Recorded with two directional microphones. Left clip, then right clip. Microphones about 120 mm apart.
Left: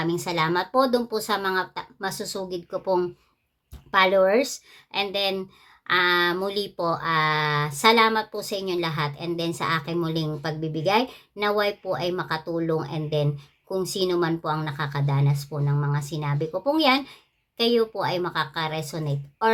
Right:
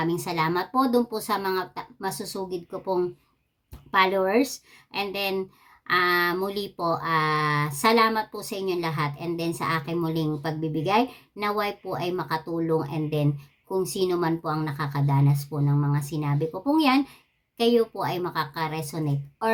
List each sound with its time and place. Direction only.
0.0 s speech: 35° left (ahead or behind)